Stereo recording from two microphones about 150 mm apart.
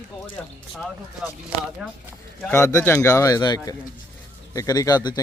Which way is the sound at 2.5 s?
20° left (ahead or behind).